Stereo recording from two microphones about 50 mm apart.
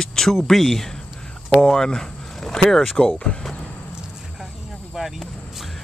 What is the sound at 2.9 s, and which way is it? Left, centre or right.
Speech, centre.